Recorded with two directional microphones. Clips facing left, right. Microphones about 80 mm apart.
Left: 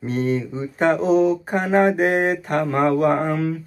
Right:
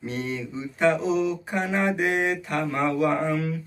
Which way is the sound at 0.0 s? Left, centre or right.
Left.